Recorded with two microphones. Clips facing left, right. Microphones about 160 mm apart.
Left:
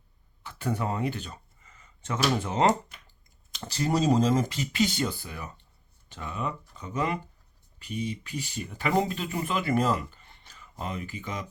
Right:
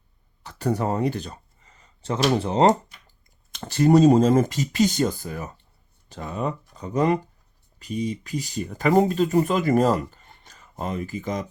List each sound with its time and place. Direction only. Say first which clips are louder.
0.4 s a sound: right 6 dB; 40° right (ahead or behind)
2.2 s speech: right 6 dB; 35° right (ahead or behind)
3.5 s speech: right 10 dB; 50° right (ahead or behind)